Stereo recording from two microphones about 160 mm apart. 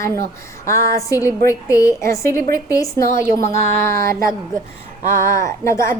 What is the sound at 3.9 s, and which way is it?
Speech, 65° right (ahead or behind).